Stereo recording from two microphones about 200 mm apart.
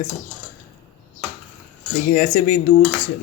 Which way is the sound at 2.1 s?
40° left (ahead or behind).